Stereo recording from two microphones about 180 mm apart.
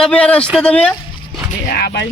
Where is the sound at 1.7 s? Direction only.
65° left (ahead or behind).